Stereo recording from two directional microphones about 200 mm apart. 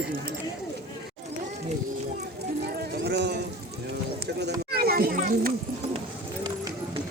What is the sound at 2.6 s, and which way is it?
Clip-clop, 50° right (ahead or behind).